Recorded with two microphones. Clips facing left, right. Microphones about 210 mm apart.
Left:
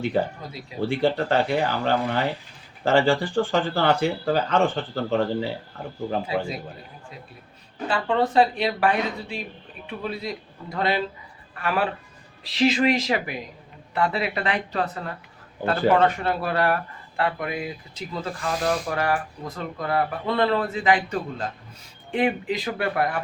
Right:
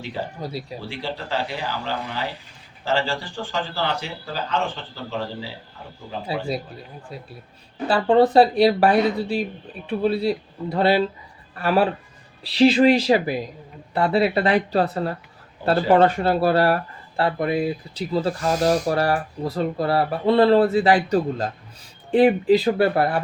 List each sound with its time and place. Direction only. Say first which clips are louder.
0.3 s speech: right 7 dB; 35° right (ahead or behind)
0.9 s speech: left 10 dB; 55° left (ahead or behind)
6.3 s speech: right 2 dB; 35° right (ahead or behind)
7.9 s speech: right 7 dB; 35° right (ahead or behind)